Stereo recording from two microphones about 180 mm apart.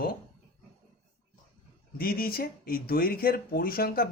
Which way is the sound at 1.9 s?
55° left (ahead or behind).